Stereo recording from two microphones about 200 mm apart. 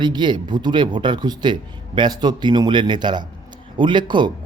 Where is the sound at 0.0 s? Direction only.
20° right (ahead or behind).